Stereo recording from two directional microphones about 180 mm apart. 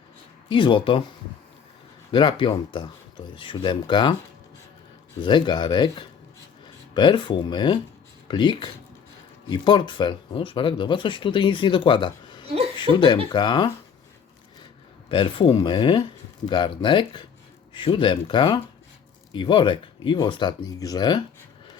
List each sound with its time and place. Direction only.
0.4 s speech: 25° left (ahead or behind)
2.1 s speech: 25° left (ahead or behind)
5.2 s speech: 25° left (ahead or behind)
12.5 s a sound: 35° right (ahead or behind)
12.9 s speech: 25° left (ahead or behind)
15.1 s speech: 25° left (ahead or behind)